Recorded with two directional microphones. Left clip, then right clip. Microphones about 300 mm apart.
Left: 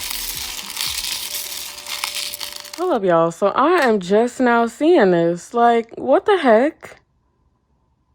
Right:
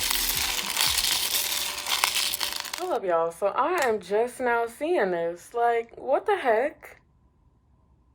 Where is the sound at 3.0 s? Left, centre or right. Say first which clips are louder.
Left 9 dB; left.